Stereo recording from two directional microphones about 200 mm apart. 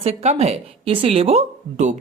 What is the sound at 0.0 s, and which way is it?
Speech, 30° right (ahead or behind).